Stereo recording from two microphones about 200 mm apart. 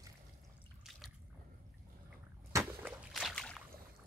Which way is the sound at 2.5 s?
10° right (ahead or behind).